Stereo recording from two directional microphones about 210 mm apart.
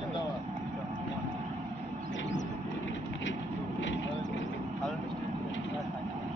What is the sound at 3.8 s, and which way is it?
Vehicle, 60° left (ahead or behind).